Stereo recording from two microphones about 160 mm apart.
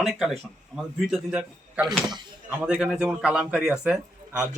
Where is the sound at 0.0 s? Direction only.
Centre (ahead or behind).